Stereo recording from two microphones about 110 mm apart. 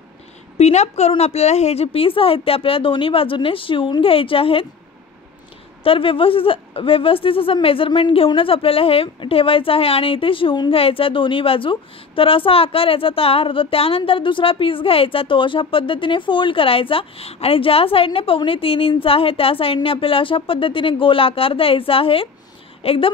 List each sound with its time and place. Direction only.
0.6 s a woman's voice: 80° left; by 4.6 s 55° left (ahead or behind)
5.9 s a woman's voice: 55° left (ahead or behind)
10.7 s a woman's voice: 60° left (ahead or behind)